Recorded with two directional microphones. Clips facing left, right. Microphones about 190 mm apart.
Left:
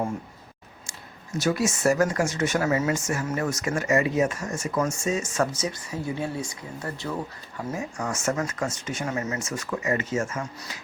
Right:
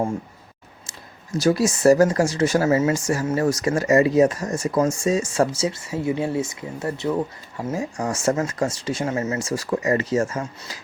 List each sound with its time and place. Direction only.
1.4 s speech: 35° right (ahead or behind)